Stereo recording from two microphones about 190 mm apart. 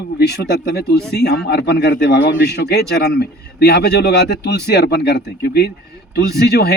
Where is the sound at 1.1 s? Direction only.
60° left (ahead or behind).